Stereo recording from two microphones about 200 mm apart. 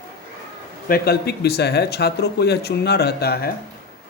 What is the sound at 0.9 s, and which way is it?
A man's voice, 50° left (ahead or behind).